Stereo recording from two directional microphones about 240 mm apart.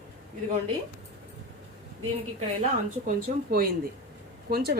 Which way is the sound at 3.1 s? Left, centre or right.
Right.